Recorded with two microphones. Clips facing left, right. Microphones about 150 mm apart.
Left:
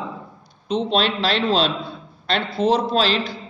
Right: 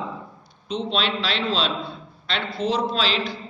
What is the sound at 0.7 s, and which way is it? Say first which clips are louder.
A man's voice: left 5 dB; 45° left (ahead or behind).